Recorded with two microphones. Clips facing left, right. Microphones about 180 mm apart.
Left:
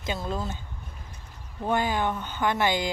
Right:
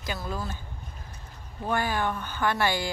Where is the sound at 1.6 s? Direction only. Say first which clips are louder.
Left 2 dB; 20° left (ahead or behind).